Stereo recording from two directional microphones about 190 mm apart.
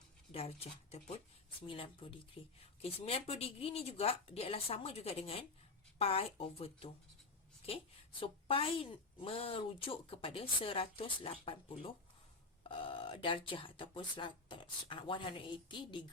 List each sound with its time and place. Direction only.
0.3 s a woman's voice: 30° left (ahead or behind)
8.2 s a woman's voice: 30° left (ahead or behind)